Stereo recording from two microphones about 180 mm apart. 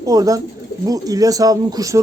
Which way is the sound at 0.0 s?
20° right (ahead or behind).